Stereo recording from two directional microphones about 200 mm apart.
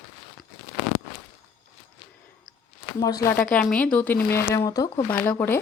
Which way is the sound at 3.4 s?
5° left (ahead or behind).